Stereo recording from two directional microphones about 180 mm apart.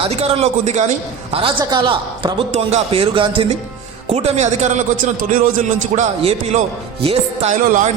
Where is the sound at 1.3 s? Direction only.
25° right (ahead or behind).